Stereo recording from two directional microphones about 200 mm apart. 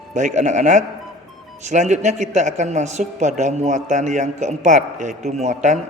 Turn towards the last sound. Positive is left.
turn(degrees=-35)  # may be behind; listen again after turning